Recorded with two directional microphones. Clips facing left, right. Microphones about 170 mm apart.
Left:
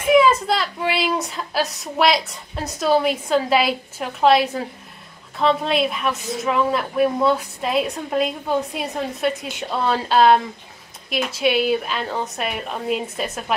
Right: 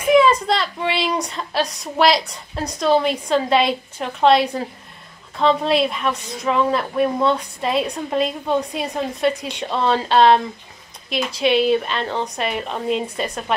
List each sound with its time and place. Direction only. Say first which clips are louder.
0.1 s a woman's voice: right 1 dB; 5° left (ahead or behind)